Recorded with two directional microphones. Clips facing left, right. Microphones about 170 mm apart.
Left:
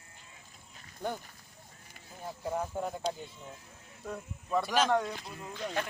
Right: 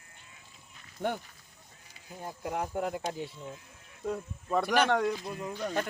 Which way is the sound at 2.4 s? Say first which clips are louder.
Right 2 dB; 80° right.